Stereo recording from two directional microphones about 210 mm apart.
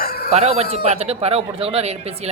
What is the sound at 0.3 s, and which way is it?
A man's voice, 30° right (ahead or behind).